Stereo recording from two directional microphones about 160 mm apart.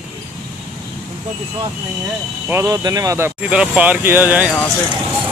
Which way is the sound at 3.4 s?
5° right (ahead or behind).